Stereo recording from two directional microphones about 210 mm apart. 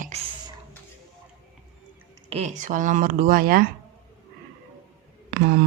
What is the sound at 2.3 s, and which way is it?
Speech, 35° right (ahead or behind).